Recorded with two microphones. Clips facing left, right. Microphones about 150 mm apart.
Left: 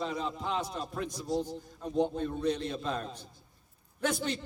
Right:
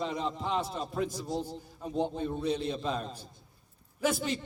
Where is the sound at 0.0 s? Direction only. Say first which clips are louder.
Right 1 dB; centre (ahead or behind).